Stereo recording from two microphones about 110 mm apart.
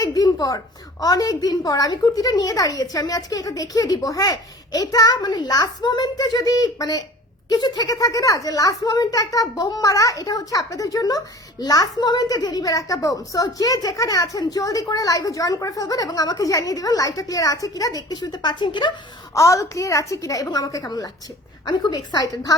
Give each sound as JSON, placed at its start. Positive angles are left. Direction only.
{"t": 0.0, "sound": "a woman's voice", "side_deg": 35}
{"t": 19.3, "sound": "a woman's voice", "side_deg": 30}